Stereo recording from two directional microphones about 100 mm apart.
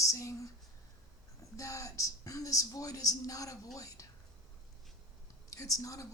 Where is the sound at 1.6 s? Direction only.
35° left (ahead or behind).